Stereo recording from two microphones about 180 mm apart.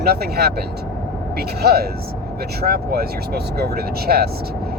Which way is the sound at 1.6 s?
60° right (ahead or behind).